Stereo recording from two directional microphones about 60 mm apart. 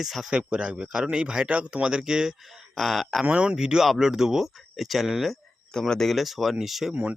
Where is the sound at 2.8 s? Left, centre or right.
Centre.